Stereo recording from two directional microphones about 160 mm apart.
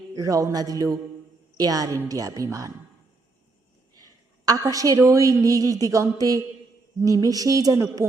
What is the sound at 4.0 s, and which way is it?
A woman's voice, 25° right (ahead or behind).